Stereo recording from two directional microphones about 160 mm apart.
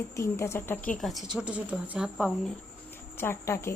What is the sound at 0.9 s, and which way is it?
Speech, centre (ahead or behind).